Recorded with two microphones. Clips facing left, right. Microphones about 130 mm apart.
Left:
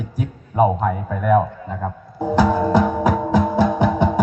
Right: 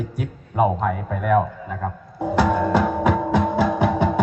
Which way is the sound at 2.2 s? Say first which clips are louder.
Left 2 dB; 30° left (ahead or behind).